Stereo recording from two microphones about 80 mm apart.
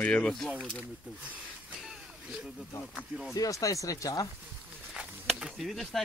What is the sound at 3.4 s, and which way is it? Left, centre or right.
Speech, left.